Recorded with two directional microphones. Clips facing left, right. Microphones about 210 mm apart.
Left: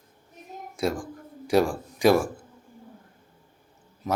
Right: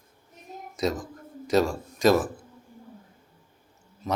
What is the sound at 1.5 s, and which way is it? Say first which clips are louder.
Speech: left 1 dB; 15° left (ahead or behind).